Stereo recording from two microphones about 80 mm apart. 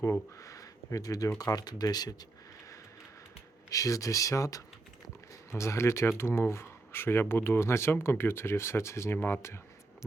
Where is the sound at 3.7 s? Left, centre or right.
Left.